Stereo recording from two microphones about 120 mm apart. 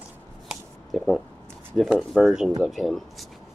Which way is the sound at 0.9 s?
Centre (ahead or behind).